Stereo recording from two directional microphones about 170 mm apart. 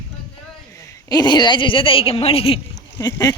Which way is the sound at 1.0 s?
25° left (ahead or behind).